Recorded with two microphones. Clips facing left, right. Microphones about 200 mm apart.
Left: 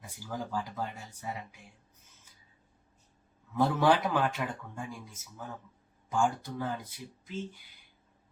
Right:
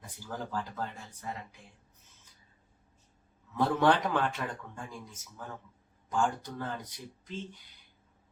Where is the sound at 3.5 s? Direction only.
5° left (ahead or behind).